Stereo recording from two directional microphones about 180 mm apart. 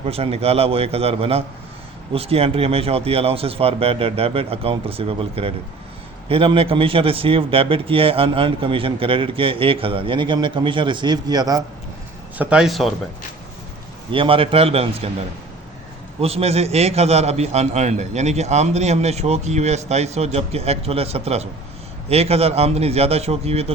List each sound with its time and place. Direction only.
0.0 s a man's voice: 35° right (ahead or behind)
12.4 s speech: 5° right (ahead or behind)
14.1 s a man's voice: 30° right (ahead or behind)
16.2 s a man's voice: 35° right (ahead or behind)